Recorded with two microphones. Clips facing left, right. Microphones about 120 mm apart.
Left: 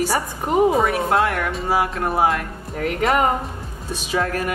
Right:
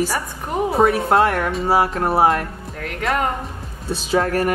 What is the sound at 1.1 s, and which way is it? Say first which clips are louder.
A woman's voice: right 3 dB; 35° right (ahead or behind).